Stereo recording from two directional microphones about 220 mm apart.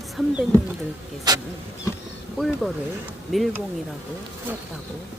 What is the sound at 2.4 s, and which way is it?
Speech, centre (ahead or behind).